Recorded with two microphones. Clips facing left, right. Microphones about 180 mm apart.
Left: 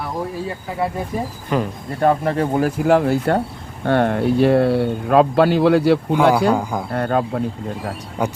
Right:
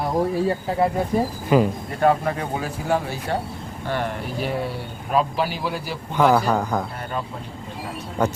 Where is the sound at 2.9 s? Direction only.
70° left (ahead or behind).